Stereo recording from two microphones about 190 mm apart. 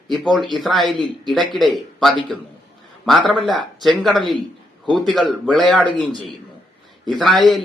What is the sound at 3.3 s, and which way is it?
Speech, centre (ahead or behind).